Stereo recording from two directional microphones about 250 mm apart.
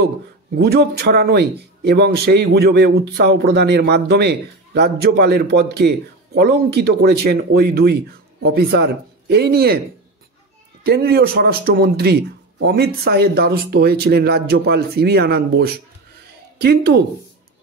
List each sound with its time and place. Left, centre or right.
0.6 s speech: right
10.8 s speech: right